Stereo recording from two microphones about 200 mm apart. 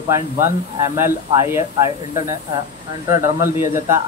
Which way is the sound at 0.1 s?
15° right (ahead or behind).